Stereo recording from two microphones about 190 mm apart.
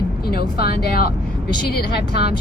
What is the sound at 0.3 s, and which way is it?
Speech, 55° left (ahead or behind).